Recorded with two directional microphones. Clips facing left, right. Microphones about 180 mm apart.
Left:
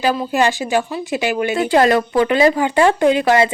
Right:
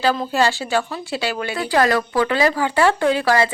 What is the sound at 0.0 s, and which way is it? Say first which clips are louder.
Speech: left 2 dB; 15° left (ahead or behind).